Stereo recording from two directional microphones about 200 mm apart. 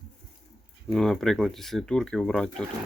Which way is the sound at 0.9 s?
5° left (ahead or behind).